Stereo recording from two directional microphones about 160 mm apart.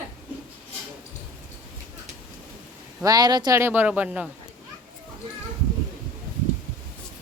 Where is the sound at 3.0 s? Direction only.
25° right (ahead or behind); by 4.3 s 10° right (ahead or behind).